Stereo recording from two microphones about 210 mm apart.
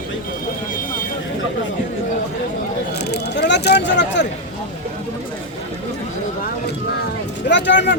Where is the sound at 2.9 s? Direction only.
50° left (ahead or behind).